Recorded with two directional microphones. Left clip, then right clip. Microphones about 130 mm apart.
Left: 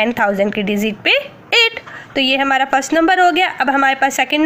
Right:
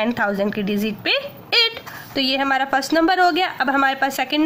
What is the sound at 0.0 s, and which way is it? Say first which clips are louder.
Speech: left 5 dB; 15° left (ahead or behind).